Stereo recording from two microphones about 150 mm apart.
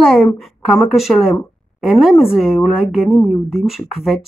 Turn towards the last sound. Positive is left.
turn(degrees=0)  # may be behind; listen again after turning